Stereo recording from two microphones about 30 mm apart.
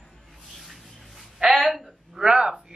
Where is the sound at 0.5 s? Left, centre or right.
Centre.